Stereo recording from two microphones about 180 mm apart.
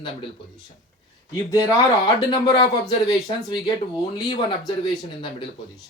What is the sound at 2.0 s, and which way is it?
Speech, 20° left (ahead or behind).